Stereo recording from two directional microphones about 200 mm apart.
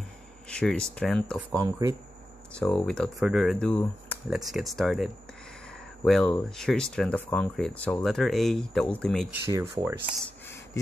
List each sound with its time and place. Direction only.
0.5 s speech: 5° left (ahead or behind)
1.5 s speech: 15° right (ahead or behind)
2.5 s speech: 5° left (ahead or behind)
9.3 s speech: 15° right (ahead or behind)